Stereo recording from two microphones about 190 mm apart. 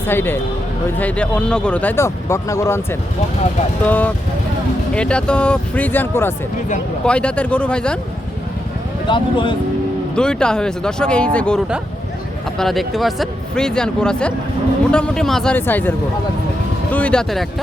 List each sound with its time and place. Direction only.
0.0 s speech: 10° left (ahead or behind)
9.0 s speech: 25° left (ahead or behind)
10.2 s speech: 5° left (ahead or behind)